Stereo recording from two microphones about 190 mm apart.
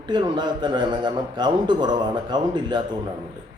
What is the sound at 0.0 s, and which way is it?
Speech, 25° right (ahead or behind).